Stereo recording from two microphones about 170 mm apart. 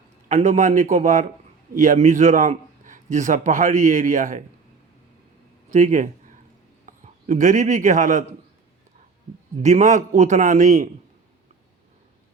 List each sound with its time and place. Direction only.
0.3 s a man's voice: 40° right (ahead or behind)
5.7 s a man's voice: 45° right (ahead or behind)
9.6 s a man's voice: 45° right (ahead or behind)